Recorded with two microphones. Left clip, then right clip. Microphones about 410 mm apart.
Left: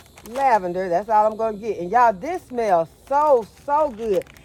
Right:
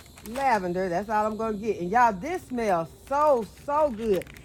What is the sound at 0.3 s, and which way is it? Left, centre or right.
Speech, left.